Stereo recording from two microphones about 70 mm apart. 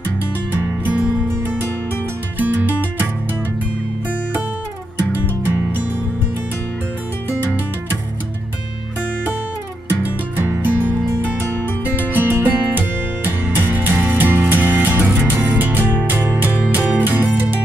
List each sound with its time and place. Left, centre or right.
0.6 s music: right
0.9 s music: centre
5.1 s music: right
10.0 s music: right